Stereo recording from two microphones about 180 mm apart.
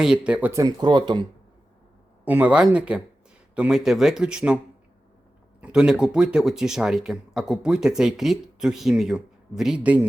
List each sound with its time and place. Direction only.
0.0 s speech: 5° right (ahead or behind)
0.6 s speech: 25° right (ahead or behind)
2.2 s speech: 10° right (ahead or behind)